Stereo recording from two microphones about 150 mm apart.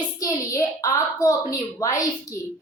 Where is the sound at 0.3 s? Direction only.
20° left (ahead or behind).